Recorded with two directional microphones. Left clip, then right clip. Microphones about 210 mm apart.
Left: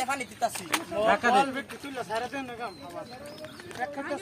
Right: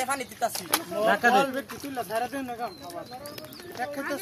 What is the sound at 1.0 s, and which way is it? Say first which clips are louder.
Speech: right 1 dB; 50° right (ahead or behind).